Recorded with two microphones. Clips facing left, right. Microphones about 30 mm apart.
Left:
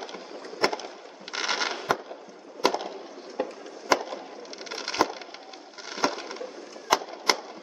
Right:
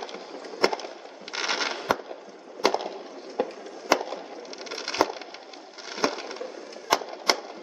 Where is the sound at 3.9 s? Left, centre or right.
Centre.